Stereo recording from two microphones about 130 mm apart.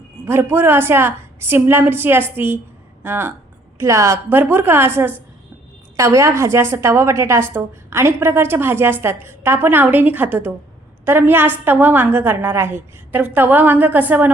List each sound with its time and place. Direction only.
0.3 s a woman's voice: 20° right (ahead or behind)